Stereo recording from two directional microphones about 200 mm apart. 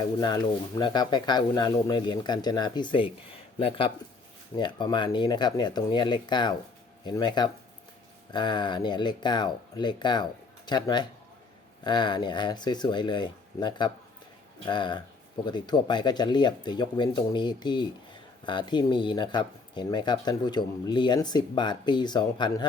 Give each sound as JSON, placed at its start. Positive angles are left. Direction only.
{"t": 0.0, "sound": "speech", "side_deg": 20}